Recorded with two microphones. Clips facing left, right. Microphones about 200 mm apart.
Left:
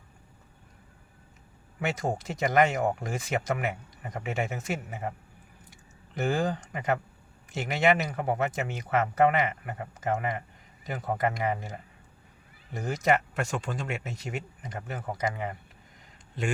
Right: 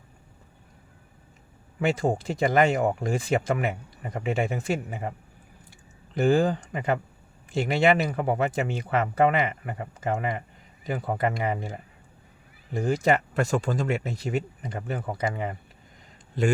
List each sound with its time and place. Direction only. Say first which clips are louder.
1.8 s speech: right 6 dB; 30° right (ahead or behind)
6.1 s speech: right 6 dB; 30° right (ahead or behind)